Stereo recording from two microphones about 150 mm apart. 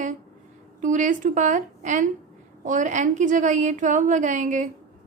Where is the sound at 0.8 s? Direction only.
60° right (ahead or behind).